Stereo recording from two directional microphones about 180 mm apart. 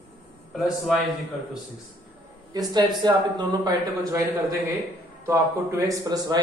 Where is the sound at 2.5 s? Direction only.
25° right (ahead or behind).